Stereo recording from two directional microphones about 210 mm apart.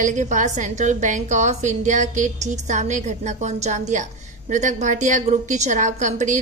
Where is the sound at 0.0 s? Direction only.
35° right (ahead or behind).